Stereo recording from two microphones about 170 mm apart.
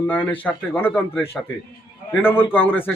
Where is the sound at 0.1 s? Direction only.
10° left (ahead or behind).